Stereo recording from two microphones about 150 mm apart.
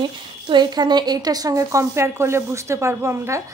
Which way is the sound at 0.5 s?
30° right (ahead or behind).